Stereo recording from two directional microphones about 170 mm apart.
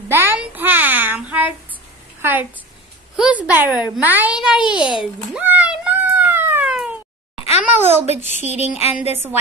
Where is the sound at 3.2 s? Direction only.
10° right (ahead or behind).